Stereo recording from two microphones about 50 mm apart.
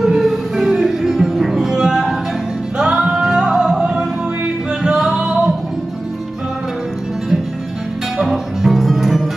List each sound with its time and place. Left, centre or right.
0.0 s music: centre
8.2 s music: centre